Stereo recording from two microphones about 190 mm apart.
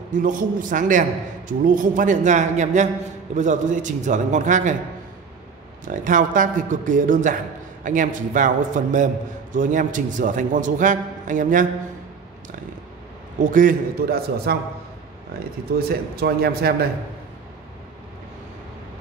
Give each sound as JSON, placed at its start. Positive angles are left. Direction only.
{"t": 0.1, "sound": "a man's voice", "side_deg": -45}
{"t": 5.9, "sound": "a man's voice", "side_deg": -45}
{"t": 13.4, "sound": "a man's voice", "side_deg": -45}
{"t": 15.9, "sound": "a man's voice", "side_deg": -55}